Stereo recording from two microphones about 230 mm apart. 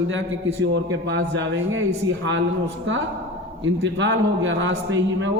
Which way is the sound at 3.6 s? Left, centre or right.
Right.